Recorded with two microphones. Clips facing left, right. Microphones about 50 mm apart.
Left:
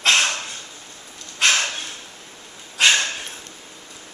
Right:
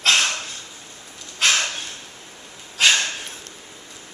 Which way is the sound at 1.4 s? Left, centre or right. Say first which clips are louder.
Left 1 dB; centre.